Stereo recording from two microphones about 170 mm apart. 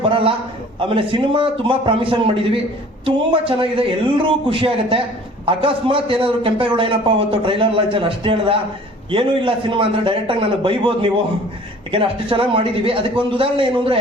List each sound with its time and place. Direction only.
0.1 s a man's voice: 30° right (ahead or behind)